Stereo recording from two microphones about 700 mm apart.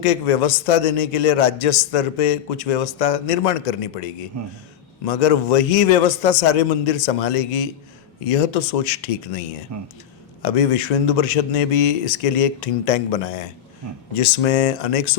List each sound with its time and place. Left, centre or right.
0.0 s a man's voice: left
9.7 s speech: right
10.4 s a man's voice: left